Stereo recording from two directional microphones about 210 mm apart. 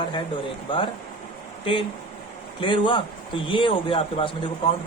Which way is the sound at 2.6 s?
25° left (ahead or behind).